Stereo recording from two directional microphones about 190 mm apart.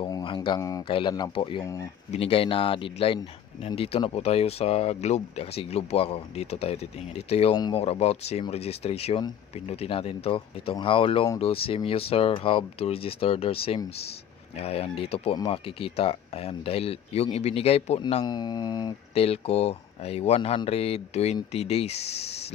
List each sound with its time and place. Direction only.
0.0 s speech: 25° left (ahead or behind)
18.0 s speech: 25° left (ahead or behind)